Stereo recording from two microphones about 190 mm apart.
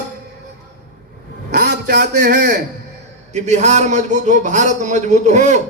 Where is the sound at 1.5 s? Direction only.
60° right (ahead or behind).